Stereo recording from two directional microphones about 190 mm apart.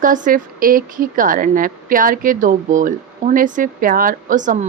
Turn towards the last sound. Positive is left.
turn(degrees=-40)  # may be behind; listen again after turning